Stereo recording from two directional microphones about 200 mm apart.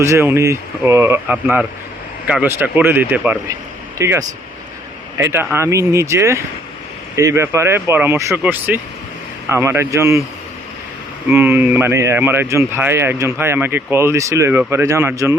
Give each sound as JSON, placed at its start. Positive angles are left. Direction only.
{"t": 0.0, "sound": "speech", "side_deg": -15}
{"t": 11.3, "sound": "speech", "side_deg": -10}